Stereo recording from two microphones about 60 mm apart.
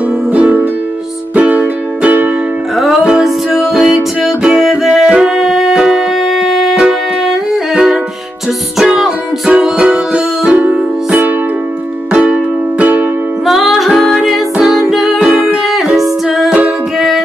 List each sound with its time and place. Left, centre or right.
0.3 s music: right
3.0 s music: centre
13.5 s music: centre
16.4 s music: right